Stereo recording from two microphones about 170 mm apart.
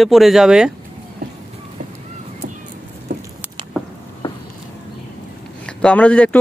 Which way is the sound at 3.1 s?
55° right (ahead or behind).